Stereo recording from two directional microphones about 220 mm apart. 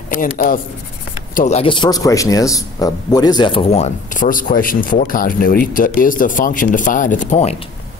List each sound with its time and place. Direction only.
0.1 s speech: 40° left (ahead or behind)